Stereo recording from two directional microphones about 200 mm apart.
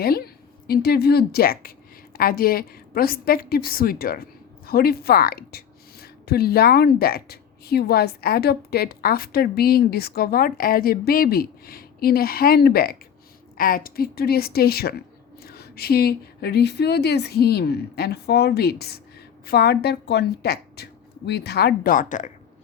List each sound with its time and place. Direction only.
0.0 s a woman's voice: 50° left (ahead or behind)